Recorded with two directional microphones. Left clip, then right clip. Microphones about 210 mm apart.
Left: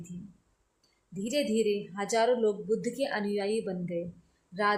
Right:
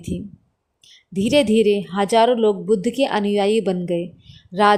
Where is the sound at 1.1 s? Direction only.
35° right (ahead or behind).